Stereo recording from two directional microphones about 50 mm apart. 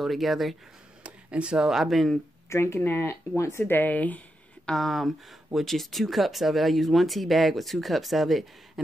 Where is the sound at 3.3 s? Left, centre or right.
Left.